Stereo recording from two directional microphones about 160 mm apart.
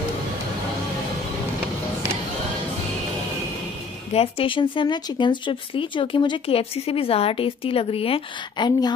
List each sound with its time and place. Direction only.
4.1 s speech: 35° left (ahead or behind)